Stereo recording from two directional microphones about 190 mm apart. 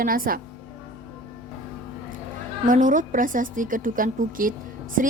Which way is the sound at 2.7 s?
45° right (ahead or behind).